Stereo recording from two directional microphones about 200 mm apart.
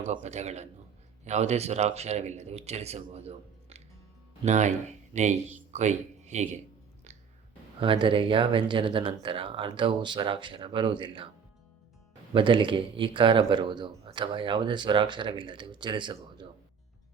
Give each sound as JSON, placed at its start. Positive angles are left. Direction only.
{"t": 0.0, "sound": "speech", "side_deg": -35}
{"t": 7.8, "sound": "speech", "side_deg": -25}
{"t": 12.3, "sound": "speech", "side_deg": -25}